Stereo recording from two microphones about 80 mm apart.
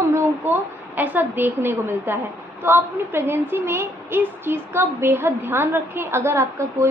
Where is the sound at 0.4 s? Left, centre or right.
Right.